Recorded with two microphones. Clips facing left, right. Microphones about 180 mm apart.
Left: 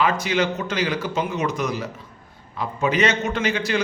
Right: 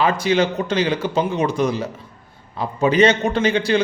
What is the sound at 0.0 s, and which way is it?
A man's voice, 30° right (ahead or behind).